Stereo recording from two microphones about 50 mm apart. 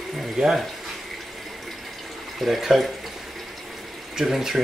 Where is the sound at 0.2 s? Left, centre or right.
Centre.